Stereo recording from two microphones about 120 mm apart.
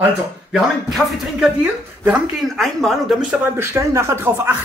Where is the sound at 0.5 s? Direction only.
5° right (ahead or behind).